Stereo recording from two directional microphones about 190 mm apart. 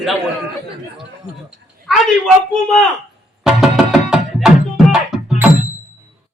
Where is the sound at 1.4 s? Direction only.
Centre (ahead or behind).